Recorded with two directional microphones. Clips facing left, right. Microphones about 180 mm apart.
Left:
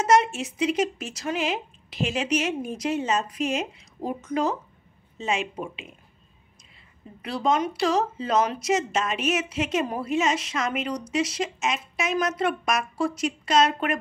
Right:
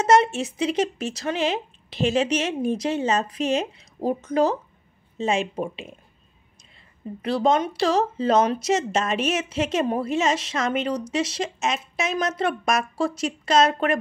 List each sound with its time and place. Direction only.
0.0 s speech: 30° right (ahead or behind)
7.2 s speech: 35° right (ahead or behind)